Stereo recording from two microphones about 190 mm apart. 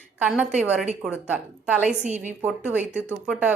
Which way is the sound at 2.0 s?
40° right (ahead or behind).